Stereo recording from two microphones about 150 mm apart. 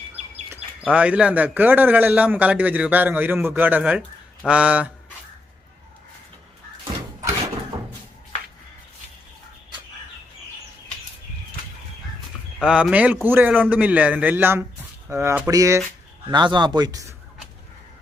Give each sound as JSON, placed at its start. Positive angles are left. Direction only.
{"t": 0.8, "sound": "a man's voice", "side_deg": -10}
{"t": 12.6, "sound": "a man's voice", "side_deg": -5}